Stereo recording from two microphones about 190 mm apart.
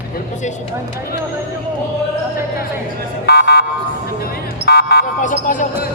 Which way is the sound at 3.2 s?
60° left (ahead or behind).